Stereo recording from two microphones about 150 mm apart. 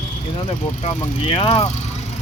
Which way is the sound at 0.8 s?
40° left (ahead or behind).